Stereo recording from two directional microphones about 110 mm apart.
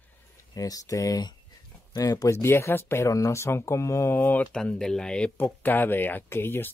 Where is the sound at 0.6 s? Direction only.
30° left (ahead or behind); by 4.6 s 15° left (ahead or behind).